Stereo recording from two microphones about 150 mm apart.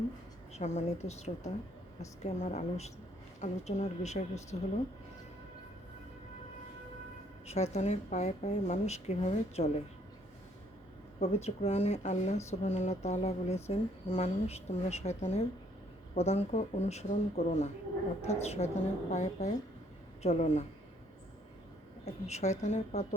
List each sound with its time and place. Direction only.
0.5 s speech: 45° left (ahead or behind)
7.4 s speech: 45° left (ahead or behind)
11.2 s speech: 45° left (ahead or behind)
22.0 s speech: 45° left (ahead or behind)